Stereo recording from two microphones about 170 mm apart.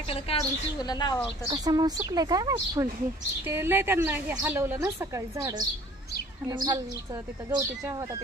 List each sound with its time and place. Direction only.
0.1 s speech: 35° left (ahead or behind)
1.5 s a woman's voice: 25° right (ahead or behind)